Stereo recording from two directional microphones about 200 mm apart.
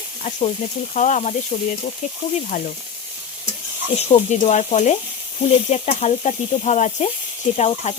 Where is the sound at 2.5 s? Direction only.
45° left (ahead or behind).